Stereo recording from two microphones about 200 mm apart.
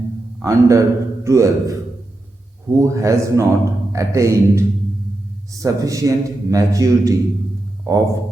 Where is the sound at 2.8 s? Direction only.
15° right (ahead or behind).